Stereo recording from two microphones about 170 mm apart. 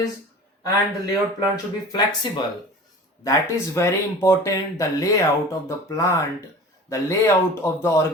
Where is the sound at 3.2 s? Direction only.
15° left (ahead or behind).